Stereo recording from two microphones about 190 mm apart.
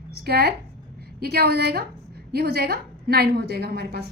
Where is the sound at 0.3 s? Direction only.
55° right (ahead or behind).